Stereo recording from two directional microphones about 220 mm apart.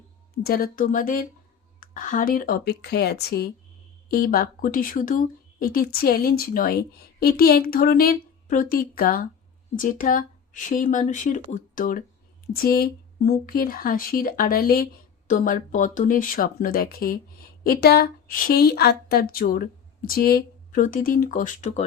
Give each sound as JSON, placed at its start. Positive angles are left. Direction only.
{"t": 0.4, "sound": "a woman's voice", "side_deg": 45}